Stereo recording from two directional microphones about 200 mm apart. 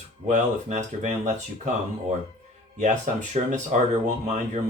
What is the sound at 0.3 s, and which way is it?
Speech, 40° right (ahead or behind).